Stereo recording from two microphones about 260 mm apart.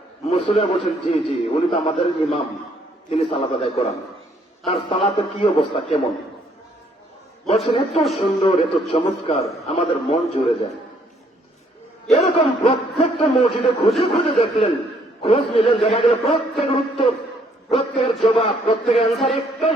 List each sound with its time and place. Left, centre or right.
0.3 s a man's voice: left
7.4 s a man's voice: left
12.1 s a man's voice: left
19.1 s a sound: centre